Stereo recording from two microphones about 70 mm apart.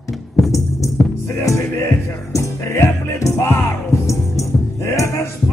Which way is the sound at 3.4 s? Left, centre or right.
Left.